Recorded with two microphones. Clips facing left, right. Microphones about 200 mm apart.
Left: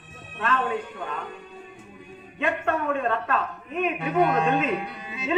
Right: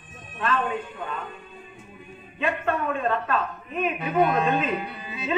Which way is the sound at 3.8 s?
75° left (ahead or behind).